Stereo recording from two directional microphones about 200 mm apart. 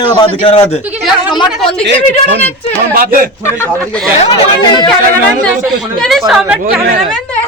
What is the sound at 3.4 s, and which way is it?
Speech, 10° left (ahead or behind).